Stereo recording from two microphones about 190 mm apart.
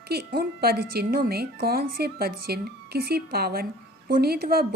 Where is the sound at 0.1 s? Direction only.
55° right (ahead or behind).